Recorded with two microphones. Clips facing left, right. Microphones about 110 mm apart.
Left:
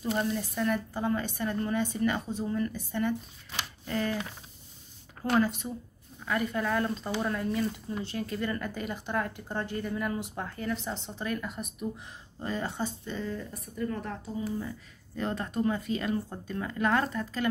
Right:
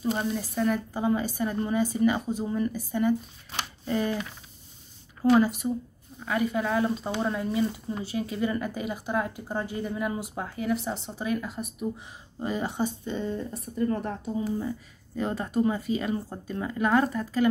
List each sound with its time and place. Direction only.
0.2 s speech: 10° right (ahead or behind)
5.3 s speech: 10° right (ahead or behind)
7.1 s speech: 20° right (ahead or behind)
8.0 s speech: 5° right (ahead or behind)
12.4 s speech: 15° right (ahead or behind); by 14.1 s 30° right (ahead or behind)
14.2 s speech: 20° right (ahead or behind)
15.1 s speech: 5° right (ahead or behind)